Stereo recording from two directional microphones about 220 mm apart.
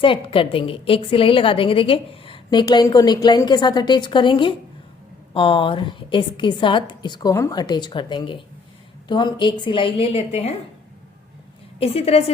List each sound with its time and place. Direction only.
0.0 s a woman's voice: 25° left (ahead or behind)
11.8 s a woman's voice: 25° left (ahead or behind)